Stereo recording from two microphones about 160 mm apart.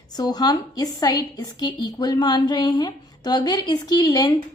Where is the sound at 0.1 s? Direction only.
25° left (ahead or behind).